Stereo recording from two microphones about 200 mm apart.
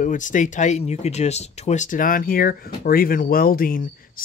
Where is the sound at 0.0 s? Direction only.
40° left (ahead or behind).